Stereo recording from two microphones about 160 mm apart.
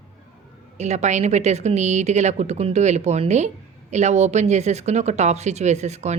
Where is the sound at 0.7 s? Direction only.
45° right (ahead or behind).